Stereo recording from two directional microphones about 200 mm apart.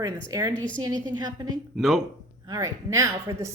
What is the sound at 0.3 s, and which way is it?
A woman's voice, 15° right (ahead or behind).